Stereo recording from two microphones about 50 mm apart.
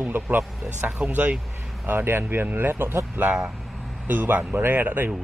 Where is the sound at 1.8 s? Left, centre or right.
Right.